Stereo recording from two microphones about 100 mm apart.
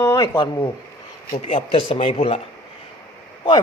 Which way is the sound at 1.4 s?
70° left (ahead or behind).